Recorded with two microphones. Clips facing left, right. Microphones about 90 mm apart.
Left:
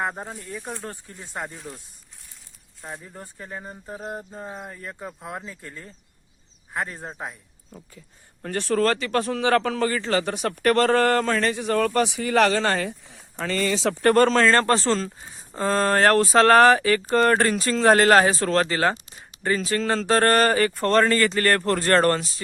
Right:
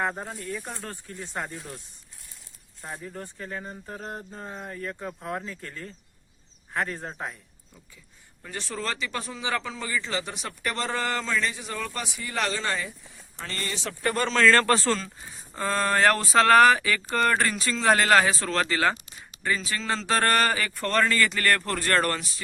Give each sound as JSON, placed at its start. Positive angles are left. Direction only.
{"t": 0.0, "sound": "speech", "side_deg": 15}
{"t": 2.8, "sound": "speech", "side_deg": 10}
{"t": 7.7, "sound": "speech", "side_deg": 45}
{"t": 14.3, "sound": "speech", "side_deg": 30}
{"t": 20.1, "sound": "speech", "side_deg": 35}